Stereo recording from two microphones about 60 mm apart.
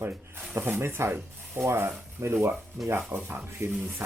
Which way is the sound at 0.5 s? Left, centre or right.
Right.